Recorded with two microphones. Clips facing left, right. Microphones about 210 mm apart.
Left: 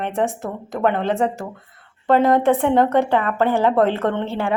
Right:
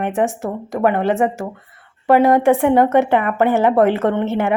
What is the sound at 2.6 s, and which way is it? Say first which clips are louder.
A woman's voice: right 3 dB; 15° right (ahead or behind).